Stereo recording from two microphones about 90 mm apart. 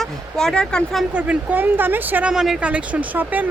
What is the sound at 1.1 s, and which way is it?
Speech, 15° right (ahead or behind).